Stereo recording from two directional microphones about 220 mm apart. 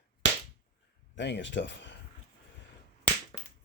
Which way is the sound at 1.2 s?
50° left (ahead or behind).